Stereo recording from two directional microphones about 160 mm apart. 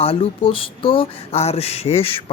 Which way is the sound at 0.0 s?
35° left (ahead or behind).